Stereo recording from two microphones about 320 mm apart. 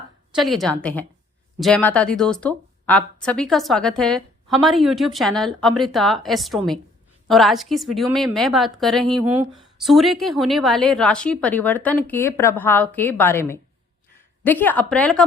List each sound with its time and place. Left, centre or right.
0.3 s a woman's voice: centre